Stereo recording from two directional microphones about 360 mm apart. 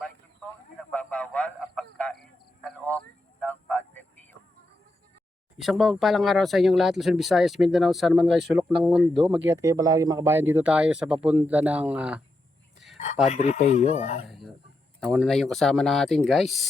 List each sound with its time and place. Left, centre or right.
0.8 s a sound: centre
3.4 s music: centre
5.6 s speech: centre
13.2 s speech: centre
14.3 s speech: centre